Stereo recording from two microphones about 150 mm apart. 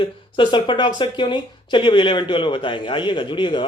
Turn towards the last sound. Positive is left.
turn(degrees=30)  # may be behind; listen again after turning